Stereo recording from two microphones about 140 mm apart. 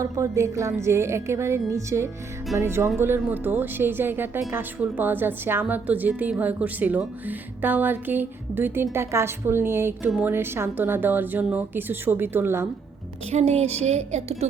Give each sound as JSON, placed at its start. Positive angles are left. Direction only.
{"t": 0.0, "sound": "a woman's voice", "side_deg": -20}
{"t": 13.3, "sound": "speech", "side_deg": -50}